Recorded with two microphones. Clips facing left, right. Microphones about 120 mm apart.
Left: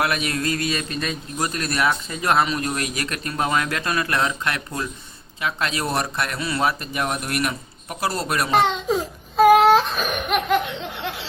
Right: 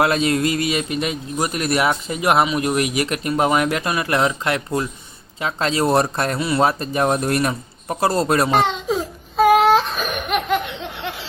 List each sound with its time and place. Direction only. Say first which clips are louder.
0.0 s a man's voice: right 6 dB; 25° right (ahead or behind)
8.4 s baby cry: right 1 dB; centre (ahead or behind)